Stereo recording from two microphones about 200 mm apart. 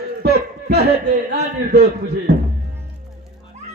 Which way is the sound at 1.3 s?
55° right (ahead or behind).